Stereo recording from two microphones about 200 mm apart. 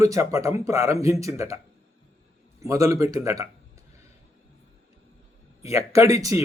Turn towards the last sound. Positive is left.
turn(degrees=-15)  # may be behind; listen again after turning